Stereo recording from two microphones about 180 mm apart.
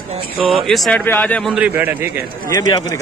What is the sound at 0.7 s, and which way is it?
Speech, centre (ahead or behind).